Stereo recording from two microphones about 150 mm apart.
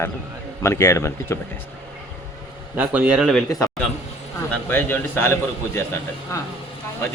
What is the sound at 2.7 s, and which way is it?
Speech, 10° right (ahead or behind).